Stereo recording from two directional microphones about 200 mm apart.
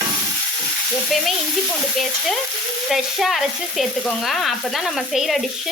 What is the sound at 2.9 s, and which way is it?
Frying, centre (ahead or behind).